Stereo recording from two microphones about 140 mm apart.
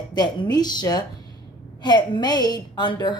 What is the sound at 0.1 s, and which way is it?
Speech, 30° left (ahead or behind).